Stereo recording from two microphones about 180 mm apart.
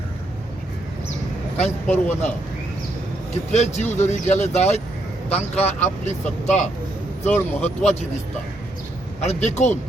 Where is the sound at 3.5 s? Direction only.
40° left (ahead or behind).